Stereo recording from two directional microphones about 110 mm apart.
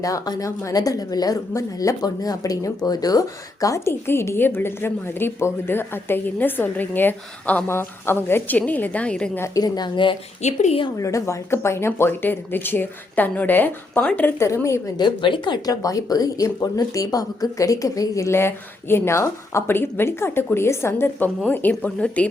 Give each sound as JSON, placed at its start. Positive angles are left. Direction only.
{"t": 0.0, "sound": "speech", "side_deg": 30}
{"t": 9.6, "sound": "a woman's voice", "side_deg": 35}
{"t": 10.4, "sound": "speech", "side_deg": 90}
{"t": 10.9, "sound": "speech", "side_deg": 30}
{"t": 14.9, "sound": "speech", "side_deg": 45}